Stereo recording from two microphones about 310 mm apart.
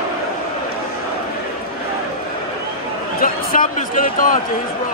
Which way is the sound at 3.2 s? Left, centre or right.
Left.